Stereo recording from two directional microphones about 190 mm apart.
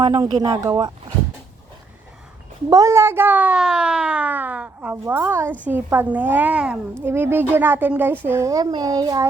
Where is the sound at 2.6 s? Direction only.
15° right (ahead or behind).